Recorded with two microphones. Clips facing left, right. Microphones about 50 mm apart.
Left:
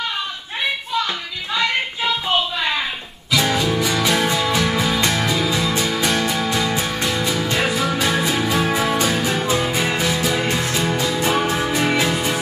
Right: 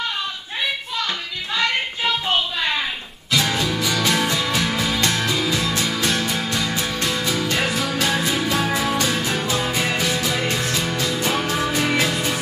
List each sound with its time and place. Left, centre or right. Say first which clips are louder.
3.4 s music: left 3 dB; left
6.1 s music: left 3 dB; left